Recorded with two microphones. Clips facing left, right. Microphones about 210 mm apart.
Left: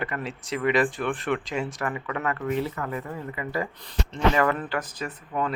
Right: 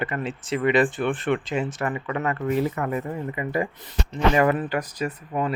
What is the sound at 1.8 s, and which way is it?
A man's voice, 25° right (ahead or behind).